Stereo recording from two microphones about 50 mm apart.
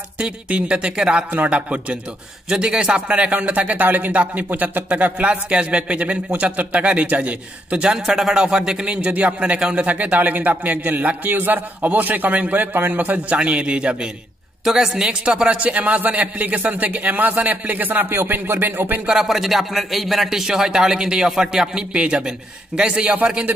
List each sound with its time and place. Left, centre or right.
0.2 s speech: right
1.3 s speech: right
7.8 s a man's voice: centre
9.8 s a man's voice: right
14.6 s a man's voice: centre; by 19.0 s right
19.1 s a man's voice: centre